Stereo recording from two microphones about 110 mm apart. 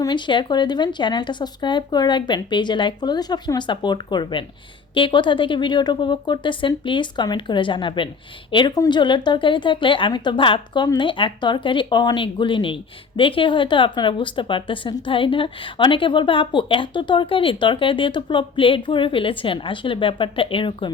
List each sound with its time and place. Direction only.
0.0 s a woman's voice: 45° left (ahead or behind)